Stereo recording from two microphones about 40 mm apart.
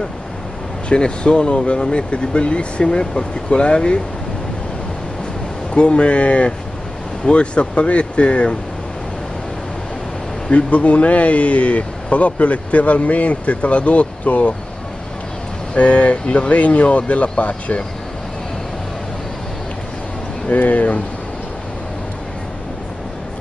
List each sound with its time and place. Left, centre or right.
0.8 s speech: left
5.8 s speech: left
10.5 s speech: left
15.7 s speech: left
20.4 s speech: left